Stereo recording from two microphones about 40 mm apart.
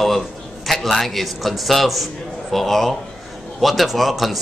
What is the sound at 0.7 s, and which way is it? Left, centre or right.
A man's voice, centre.